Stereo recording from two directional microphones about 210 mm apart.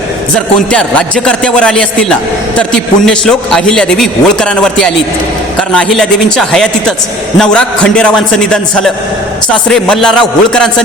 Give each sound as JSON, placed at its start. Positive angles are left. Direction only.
{"t": 0.3, "sound": "a man's voice", "side_deg": 5}